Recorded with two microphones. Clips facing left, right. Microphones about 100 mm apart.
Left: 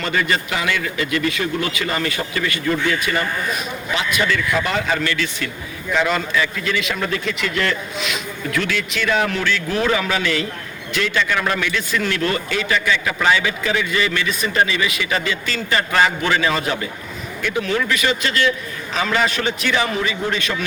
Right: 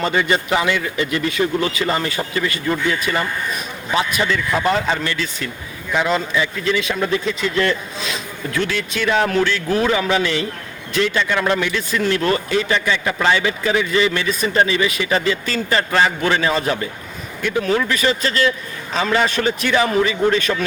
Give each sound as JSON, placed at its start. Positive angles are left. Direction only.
{"t": 0.0, "sound": "a man's voice", "side_deg": -25}